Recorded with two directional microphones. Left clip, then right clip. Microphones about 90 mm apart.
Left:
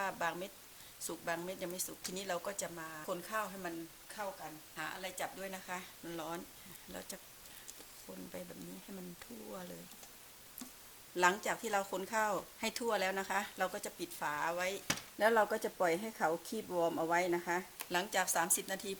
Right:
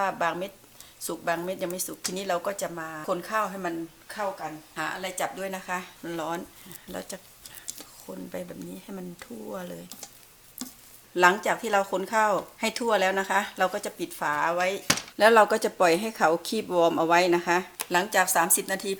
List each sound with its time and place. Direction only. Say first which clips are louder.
0.0 s speech: right 11 dB; 30° left (ahead or behind)
8.1 s speech: right 12 dB; 15° left (ahead or behind)
10.6 s a sound: right 13 dB; 5° right (ahead or behind)
11.1 s speech: right 11 dB; 30° left (ahead or behind)
14.8 s speech: right 13 dB; centre (ahead or behind)
17.8 s speech: right 11 dB; 20° left (ahead or behind)